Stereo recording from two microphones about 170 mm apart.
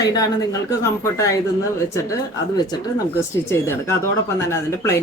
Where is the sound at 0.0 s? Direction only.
20° left (ahead or behind).